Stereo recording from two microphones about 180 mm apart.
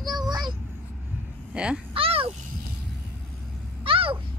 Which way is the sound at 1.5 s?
5° right (ahead or behind).